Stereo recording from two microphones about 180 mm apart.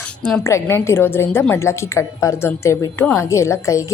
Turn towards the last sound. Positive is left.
turn(degrees=15)  # may be behind; listen again after turning